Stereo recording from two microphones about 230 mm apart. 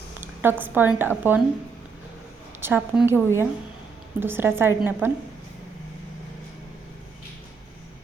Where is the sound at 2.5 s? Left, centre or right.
Centre.